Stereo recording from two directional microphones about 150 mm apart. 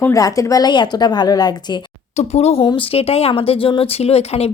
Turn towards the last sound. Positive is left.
turn(degrees=45)  # may be behind; listen again after turning